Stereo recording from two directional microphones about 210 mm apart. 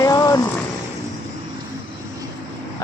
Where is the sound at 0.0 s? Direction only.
15° left (ahead or behind).